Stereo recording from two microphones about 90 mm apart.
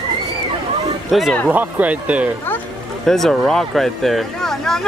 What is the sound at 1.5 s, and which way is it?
Speech, 20° right (ahead or behind).